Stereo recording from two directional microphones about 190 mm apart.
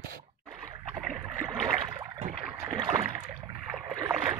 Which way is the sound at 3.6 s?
5° right (ahead or behind).